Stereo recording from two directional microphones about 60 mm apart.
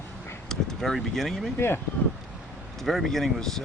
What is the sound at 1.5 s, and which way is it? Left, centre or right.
Speech, left.